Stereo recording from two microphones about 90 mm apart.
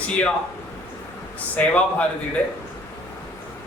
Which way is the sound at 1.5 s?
15° left (ahead or behind).